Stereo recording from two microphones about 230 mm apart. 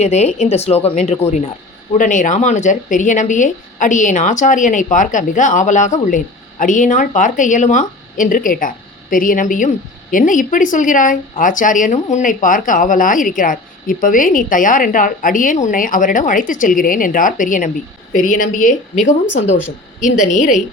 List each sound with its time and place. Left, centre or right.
0.0 s speech: left
20.1 s speech: left